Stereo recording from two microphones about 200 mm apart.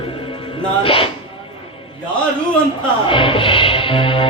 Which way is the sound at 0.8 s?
25° left (ahead or behind).